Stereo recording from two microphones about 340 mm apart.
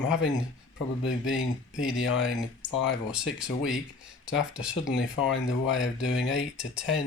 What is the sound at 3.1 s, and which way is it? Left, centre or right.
Speech, centre.